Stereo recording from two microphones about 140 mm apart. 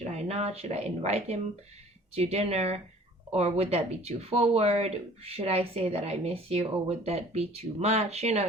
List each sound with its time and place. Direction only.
0.0 s speech: 50° right (ahead or behind)